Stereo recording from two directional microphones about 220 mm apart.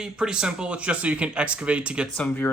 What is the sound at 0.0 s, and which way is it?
Speech, 5° right (ahead or behind).